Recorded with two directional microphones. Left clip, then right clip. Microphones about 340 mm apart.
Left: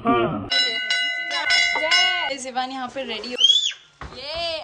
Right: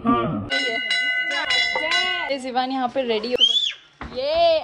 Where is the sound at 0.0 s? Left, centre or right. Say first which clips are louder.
Left 1 dB; left.